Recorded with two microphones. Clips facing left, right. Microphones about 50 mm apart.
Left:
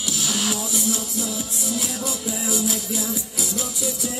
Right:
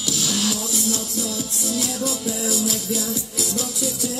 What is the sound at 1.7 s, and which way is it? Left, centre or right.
Music, centre.